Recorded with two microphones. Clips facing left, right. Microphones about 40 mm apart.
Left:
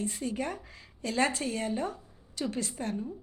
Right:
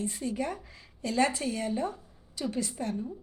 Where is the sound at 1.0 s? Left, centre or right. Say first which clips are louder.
Right 1 dB; left.